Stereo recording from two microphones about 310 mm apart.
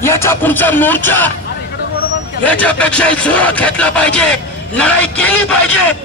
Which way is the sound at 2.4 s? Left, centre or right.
Centre.